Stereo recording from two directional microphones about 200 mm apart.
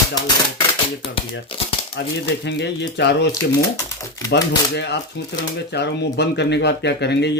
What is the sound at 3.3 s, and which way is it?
Speech, 15° left (ahead or behind).